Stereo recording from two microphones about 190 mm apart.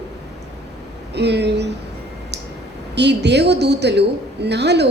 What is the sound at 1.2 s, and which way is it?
Speech, 65° right (ahead or behind).